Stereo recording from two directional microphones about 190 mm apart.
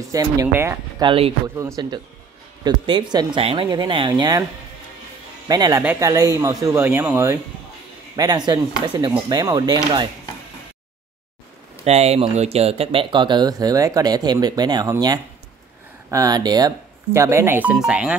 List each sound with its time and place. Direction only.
0.1 s speech: 20° right (ahead or behind)
1.0 s speech: 30° right (ahead or behind)
5.5 s speech: 20° right (ahead or behind)
11.8 s speech: 35° right (ahead or behind); by 18.1 s 5° right (ahead or behind)